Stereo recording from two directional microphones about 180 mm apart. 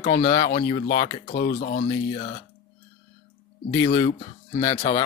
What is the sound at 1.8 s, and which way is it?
Speech, 30° left (ahead or behind).